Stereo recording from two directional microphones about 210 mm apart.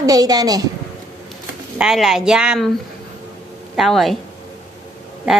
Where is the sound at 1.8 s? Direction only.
Centre (ahead or behind).